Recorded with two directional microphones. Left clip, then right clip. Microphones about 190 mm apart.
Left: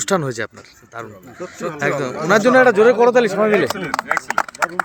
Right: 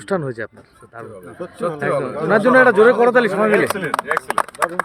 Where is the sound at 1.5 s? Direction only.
65° right (ahead or behind).